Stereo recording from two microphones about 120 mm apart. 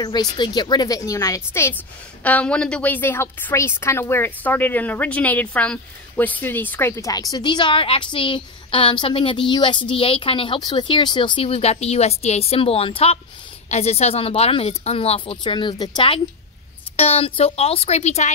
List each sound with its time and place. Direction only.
0.0 s speech: 35° left (ahead or behind); by 1.8 s 20° left (ahead or behind)
2.2 s a woman's voice: 10° left (ahead or behind)
7.1 s a woman's voice: 30° left (ahead or behind)
16.9 s speech: 60° left (ahead or behind)